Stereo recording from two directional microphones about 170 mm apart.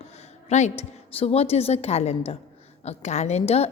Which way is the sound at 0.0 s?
40° left (ahead or behind).